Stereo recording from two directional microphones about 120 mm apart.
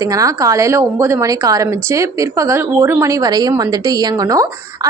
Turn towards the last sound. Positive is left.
turn(degrees=-30)  # may be behind; listen again after turning